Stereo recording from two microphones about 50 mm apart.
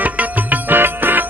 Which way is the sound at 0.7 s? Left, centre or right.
Right.